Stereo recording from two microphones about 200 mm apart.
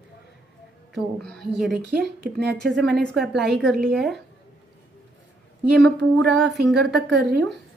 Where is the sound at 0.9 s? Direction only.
5° left (ahead or behind).